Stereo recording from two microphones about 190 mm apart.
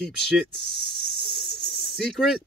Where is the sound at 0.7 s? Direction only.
25° right (ahead or behind).